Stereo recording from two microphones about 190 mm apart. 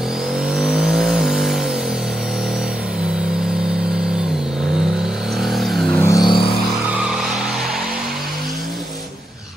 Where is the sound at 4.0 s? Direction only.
5° right (ahead or behind).